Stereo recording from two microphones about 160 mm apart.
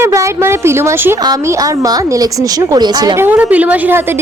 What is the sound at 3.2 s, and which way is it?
Speech, 10° right (ahead or behind).